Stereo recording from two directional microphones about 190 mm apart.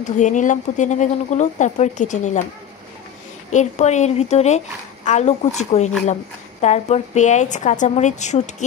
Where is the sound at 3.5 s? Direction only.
35° left (ahead or behind).